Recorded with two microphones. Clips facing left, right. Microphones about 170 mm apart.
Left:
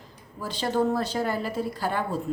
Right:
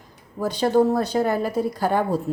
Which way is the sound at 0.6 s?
40° right (ahead or behind).